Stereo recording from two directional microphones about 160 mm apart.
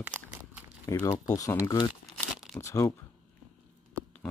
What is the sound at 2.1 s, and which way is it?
Crumpling, 5° left (ahead or behind).